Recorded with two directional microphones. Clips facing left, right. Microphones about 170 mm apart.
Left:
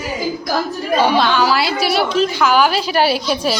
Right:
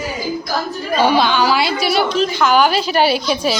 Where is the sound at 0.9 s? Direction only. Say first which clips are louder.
Even; centre (ahead or behind).